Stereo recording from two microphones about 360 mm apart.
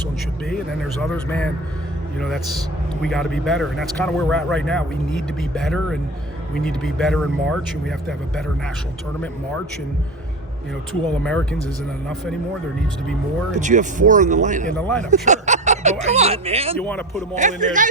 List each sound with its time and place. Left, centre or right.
1.1 s speech: centre
11.2 s speech: centre
13.6 s speech: centre
14.7 s speech: centre
15.1 s speech: centre